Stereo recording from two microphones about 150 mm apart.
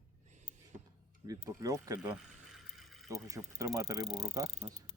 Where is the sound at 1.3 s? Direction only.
25° right (ahead or behind).